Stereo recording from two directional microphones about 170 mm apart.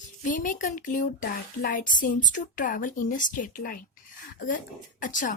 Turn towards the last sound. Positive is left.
turn(degrees=50)  # may be behind; listen again after turning